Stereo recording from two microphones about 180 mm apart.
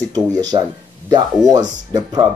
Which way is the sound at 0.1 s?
20° right (ahead or behind).